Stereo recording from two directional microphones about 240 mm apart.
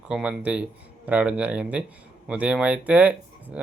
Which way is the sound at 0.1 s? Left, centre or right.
Centre.